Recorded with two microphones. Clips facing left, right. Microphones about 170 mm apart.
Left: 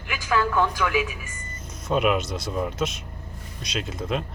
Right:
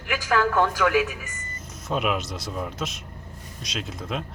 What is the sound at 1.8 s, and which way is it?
Speech, centre (ahead or behind).